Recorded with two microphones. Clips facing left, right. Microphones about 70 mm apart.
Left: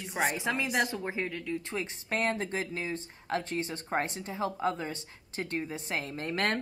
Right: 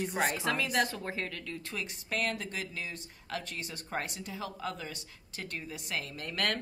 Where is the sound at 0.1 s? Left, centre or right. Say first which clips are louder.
Left 5 dB; centre.